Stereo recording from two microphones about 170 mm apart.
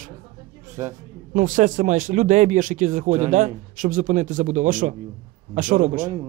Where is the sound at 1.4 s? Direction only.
50° right (ahead or behind).